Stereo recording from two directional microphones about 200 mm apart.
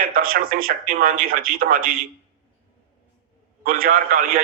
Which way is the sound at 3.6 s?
45° right (ahead or behind).